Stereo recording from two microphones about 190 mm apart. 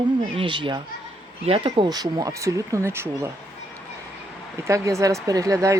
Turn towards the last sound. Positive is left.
turn(degrees=-15)  # may be behind; listen again after turning